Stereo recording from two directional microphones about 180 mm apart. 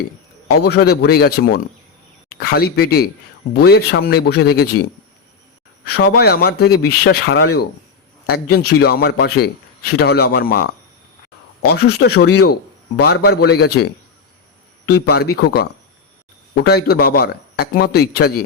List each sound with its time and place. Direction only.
0.6 s speech: 65° left (ahead or behind)
11.7 s speech: 65° left (ahead or behind)
14.8 s speech: 65° left (ahead or behind)
16.6 s speech: 60° left (ahead or behind)